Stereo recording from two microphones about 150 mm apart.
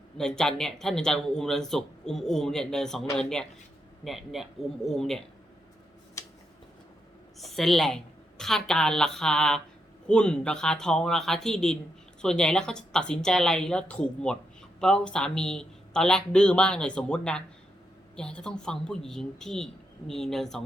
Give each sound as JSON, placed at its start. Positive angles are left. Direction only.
{"t": 0.2, "sound": "a man's voice", "side_deg": 5}
{"t": 6.2, "sound": "a sound", "side_deg": 20}
{"t": 7.3, "sound": "a man's voice", "side_deg": 0}